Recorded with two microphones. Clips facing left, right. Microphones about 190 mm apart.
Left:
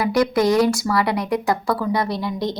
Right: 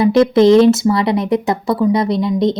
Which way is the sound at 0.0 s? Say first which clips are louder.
Right 8 dB; 25° right (ahead or behind).